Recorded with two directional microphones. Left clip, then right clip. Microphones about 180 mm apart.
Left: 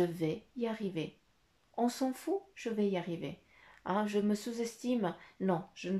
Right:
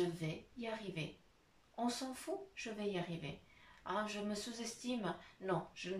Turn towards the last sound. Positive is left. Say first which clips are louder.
# left 5 dB
turn(degrees=40)  # may be behind; listen again after turning